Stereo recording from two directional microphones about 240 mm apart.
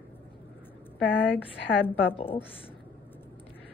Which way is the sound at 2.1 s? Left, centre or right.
Left.